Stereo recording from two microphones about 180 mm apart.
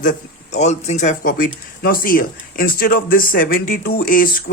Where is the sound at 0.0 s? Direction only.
45° left (ahead or behind).